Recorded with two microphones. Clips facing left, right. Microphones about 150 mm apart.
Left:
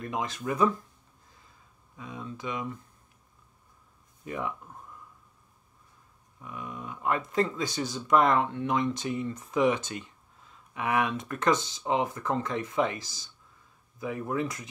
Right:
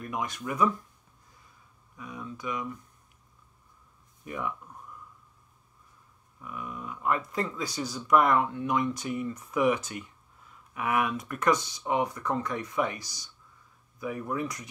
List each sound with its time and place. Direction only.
0.0 s speech: 25° left (ahead or behind)
2.0 s speech: 25° left (ahead or behind)
4.2 s speech: 25° left (ahead or behind)
6.4 s speech: 20° left (ahead or behind)